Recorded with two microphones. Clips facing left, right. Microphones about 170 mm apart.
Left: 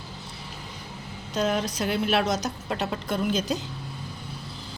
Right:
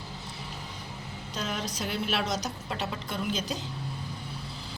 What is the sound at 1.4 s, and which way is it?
Speech, 55° left (ahead or behind).